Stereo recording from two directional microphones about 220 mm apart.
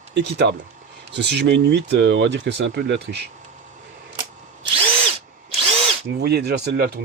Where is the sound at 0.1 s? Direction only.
50° right (ahead or behind).